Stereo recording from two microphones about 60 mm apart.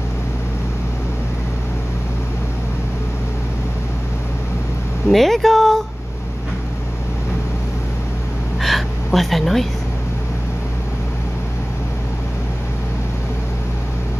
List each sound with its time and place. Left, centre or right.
5.1 s speech: centre
8.5 s gasp: centre